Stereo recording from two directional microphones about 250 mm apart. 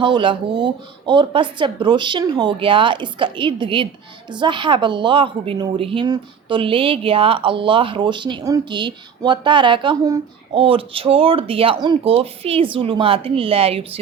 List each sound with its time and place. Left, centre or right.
0.0 s a woman's voice: centre